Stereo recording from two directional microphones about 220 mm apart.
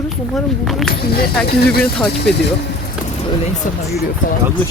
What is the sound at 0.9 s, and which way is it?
Speech, 45° left (ahead or behind).